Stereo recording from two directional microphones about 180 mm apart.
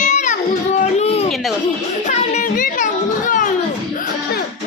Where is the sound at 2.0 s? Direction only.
45° left (ahead or behind).